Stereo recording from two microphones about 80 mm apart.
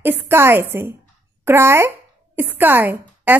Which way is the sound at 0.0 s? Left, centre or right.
Right.